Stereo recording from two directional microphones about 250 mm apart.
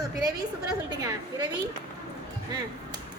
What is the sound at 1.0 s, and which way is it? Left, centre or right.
Speech, centre.